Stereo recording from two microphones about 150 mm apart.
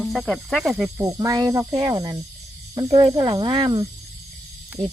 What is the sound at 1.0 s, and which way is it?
Speech, 20° right (ahead or behind).